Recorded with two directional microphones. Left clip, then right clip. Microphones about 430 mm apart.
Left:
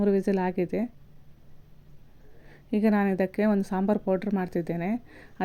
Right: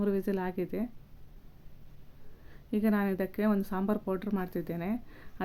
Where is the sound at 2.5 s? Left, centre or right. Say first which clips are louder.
Left 5 dB; centre.